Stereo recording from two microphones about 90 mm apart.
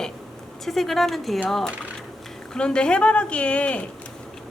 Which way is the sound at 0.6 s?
Centre (ahead or behind).